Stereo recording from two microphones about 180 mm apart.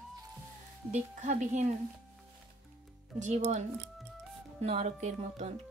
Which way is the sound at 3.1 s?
40° right (ahead or behind).